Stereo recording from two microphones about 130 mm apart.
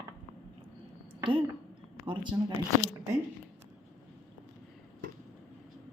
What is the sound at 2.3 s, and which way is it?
Speech, 25° right (ahead or behind).